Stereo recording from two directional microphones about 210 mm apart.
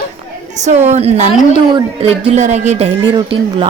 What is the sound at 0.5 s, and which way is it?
Speech, 35° right (ahead or behind).